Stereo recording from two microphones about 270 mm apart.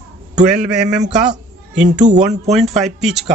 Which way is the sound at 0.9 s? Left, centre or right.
Right.